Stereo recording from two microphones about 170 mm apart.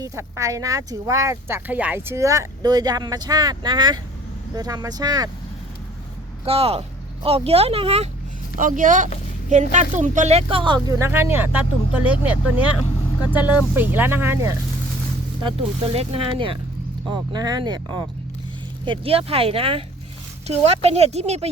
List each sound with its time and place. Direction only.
0.0 s speech: 20° right (ahead or behind)
6.4 s speech: 35° right (ahead or behind)
8.5 s speech: 50° right (ahead or behind); by 14.5 s 15° right (ahead or behind)
15.4 s speech: 35° right (ahead or behind)